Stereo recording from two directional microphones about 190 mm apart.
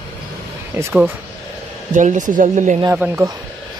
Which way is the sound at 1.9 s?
40° right (ahead or behind).